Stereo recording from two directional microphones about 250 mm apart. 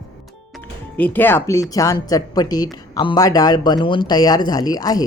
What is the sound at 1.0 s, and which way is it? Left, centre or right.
Speech, centre.